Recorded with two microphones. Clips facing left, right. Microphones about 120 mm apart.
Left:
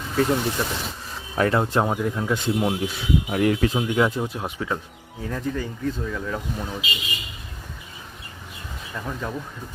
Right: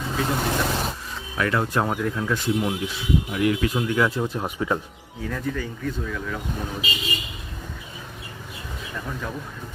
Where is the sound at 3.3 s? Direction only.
45° left (ahead or behind).